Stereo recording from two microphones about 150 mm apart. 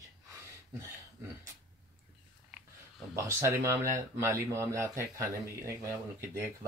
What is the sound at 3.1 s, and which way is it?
Speech, 20° right (ahead or behind).